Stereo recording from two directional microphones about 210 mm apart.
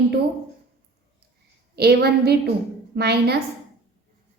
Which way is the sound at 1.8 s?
50° right (ahead or behind).